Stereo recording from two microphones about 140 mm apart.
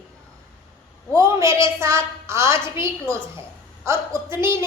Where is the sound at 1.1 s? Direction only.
25° right (ahead or behind).